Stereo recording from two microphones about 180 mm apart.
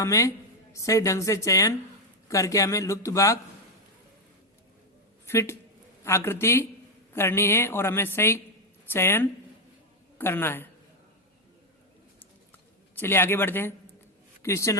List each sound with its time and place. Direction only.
0.0 s a woman's voice: 15° left (ahead or behind)
5.2 s a woman's voice: 15° left (ahead or behind)
13.0 s a woman's voice: 10° left (ahead or behind)